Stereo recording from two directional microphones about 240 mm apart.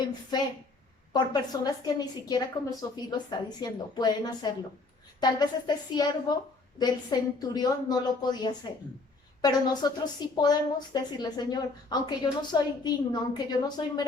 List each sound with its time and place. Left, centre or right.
0.3 s a woman's voice: centre